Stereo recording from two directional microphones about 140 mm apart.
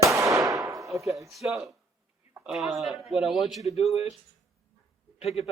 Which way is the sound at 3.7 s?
45° left (ahead or behind).